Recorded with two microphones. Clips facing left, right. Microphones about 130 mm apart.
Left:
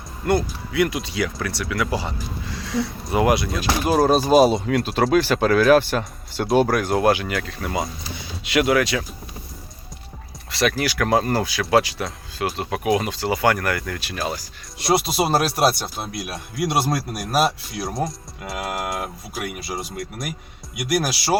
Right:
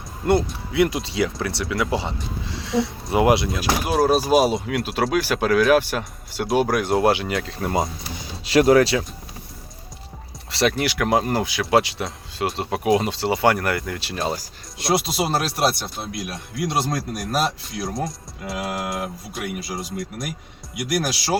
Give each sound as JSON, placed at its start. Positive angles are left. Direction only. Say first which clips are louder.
{"t": 0.3, "sound": "speech", "louder": "right 1 dB", "side_deg": -25}
{"t": 3.5, "sound": "speech", "louder": "left 2 dB", "side_deg": -5}
{"t": 8.4, "sound": "speech", "louder": "right 4 dB", "side_deg": -35}
{"t": 10.5, "sound": "speech", "louder": "right 1 dB", "side_deg": -25}
{"t": 14.8, "sound": "speech", "louder": "left 2 dB", "side_deg": 0}